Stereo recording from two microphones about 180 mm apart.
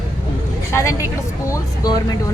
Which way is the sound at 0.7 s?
15° left (ahead or behind).